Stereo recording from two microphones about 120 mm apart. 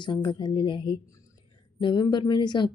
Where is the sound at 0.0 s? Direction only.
40° left (ahead or behind).